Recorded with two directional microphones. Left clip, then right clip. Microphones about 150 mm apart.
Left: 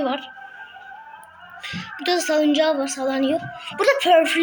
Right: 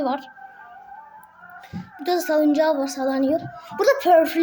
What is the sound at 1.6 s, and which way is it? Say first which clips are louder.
Speech: left 2 dB; 10° right (ahead or behind).